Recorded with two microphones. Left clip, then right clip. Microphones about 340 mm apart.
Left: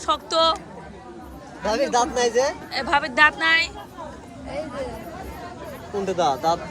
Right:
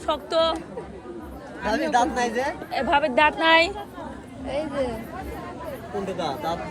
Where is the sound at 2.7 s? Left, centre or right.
Centre.